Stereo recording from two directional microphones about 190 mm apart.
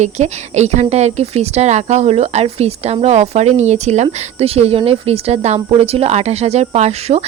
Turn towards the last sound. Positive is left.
turn(degrees=-35)  # may be behind; listen again after turning